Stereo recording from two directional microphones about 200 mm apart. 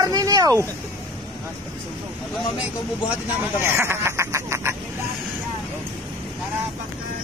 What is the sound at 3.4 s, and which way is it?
Speech, 10° right (ahead or behind).